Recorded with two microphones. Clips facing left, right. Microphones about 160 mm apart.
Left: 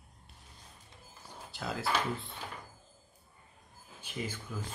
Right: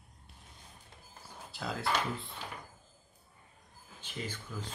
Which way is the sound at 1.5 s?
Centre (ahead or behind).